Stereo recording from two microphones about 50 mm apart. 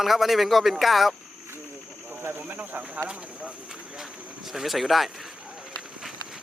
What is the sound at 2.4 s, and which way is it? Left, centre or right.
Speech, right.